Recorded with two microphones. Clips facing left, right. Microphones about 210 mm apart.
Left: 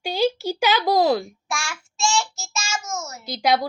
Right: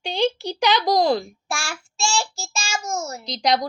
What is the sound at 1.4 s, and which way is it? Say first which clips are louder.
A child's voice: right 1 dB; 30° right (ahead or behind).